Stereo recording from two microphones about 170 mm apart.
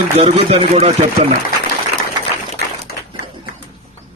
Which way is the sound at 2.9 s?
65° left (ahead or behind).